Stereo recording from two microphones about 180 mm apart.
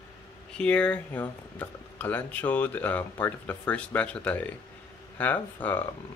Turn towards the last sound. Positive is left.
turn(degrees=10)  # may be behind; listen again after turning